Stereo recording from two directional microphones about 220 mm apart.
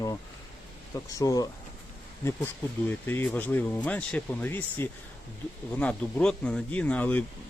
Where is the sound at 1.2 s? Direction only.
15° left (ahead or behind).